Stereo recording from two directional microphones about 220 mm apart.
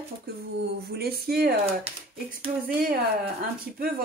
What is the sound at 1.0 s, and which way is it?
Speech, 45° right (ahead or behind).